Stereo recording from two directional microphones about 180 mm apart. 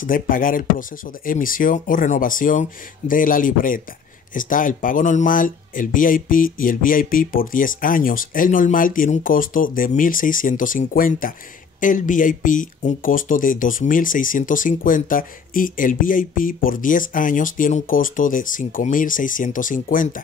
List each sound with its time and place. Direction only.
0.0 s speech: 50° left (ahead or behind)